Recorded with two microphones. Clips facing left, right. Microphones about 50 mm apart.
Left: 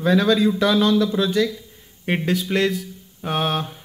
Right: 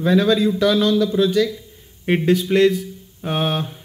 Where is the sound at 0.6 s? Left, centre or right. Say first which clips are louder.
Right 1 dB; centre.